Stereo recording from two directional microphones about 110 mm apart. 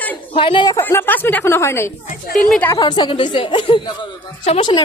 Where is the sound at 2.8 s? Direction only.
45° left (ahead or behind).